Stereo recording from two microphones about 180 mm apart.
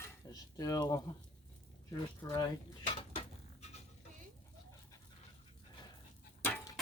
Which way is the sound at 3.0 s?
35° left (ahead or behind).